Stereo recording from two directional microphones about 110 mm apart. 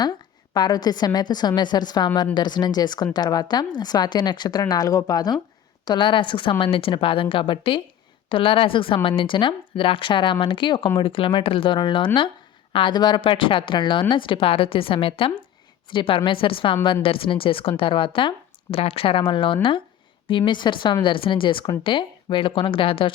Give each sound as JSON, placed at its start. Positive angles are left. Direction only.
{"t": 0.5, "sound": "a woman's voice", "side_deg": 40}